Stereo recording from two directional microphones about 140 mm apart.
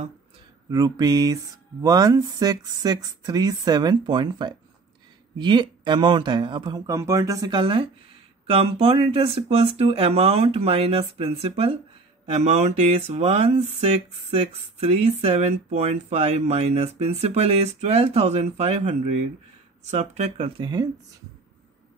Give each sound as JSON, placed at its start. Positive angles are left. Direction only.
{"t": 0.7, "sound": "speech", "side_deg": -25}
{"t": 6.9, "sound": "speech", "side_deg": -20}